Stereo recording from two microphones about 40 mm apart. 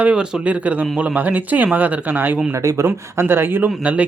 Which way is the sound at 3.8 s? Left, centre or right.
Right.